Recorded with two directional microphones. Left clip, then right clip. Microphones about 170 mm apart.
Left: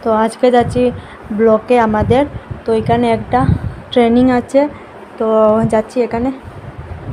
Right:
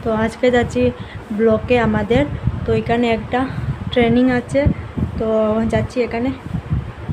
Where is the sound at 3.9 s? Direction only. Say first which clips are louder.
Left 4 dB; 20° left (ahead or behind).